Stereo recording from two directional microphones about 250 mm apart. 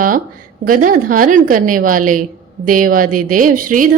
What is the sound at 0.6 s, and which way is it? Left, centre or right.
A woman's voice, right.